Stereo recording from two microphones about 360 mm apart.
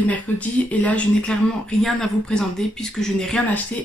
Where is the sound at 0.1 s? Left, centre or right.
Centre.